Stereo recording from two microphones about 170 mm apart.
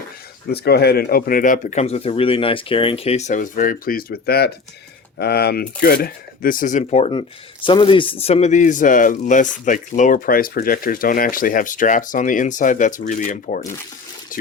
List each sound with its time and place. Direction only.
0.4 s speech: 70° left (ahead or behind); by 13.7 s 50° left (ahead or behind)